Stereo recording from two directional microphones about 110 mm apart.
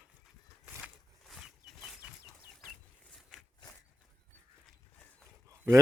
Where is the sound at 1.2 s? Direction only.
Centre (ahead or behind).